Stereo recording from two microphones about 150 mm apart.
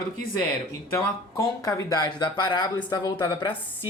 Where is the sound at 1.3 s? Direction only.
25° left (ahead or behind).